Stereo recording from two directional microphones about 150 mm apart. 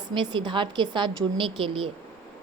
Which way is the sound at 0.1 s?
30° right (ahead or behind).